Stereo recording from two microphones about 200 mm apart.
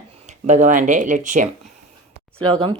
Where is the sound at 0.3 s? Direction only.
35° right (ahead or behind).